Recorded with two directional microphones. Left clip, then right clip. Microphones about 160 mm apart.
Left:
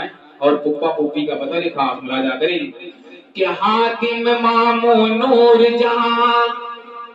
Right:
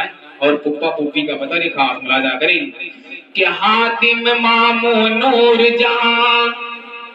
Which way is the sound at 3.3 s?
40° left (ahead or behind).